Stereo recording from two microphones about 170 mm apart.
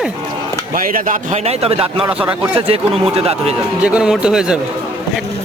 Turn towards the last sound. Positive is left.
turn(degrees=-5)  # may be behind; listen again after turning